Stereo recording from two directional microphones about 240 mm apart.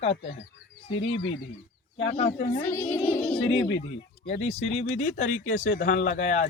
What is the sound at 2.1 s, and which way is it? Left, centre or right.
Speech, left.